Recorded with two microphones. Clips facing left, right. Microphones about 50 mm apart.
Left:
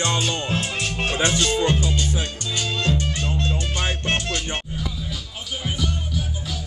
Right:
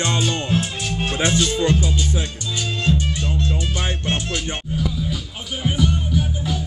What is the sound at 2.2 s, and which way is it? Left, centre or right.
Music, left.